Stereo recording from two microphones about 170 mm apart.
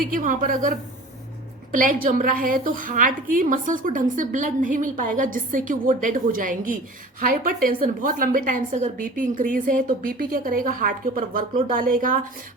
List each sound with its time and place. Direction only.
0.0 s a woman's voice: 55° right (ahead or behind)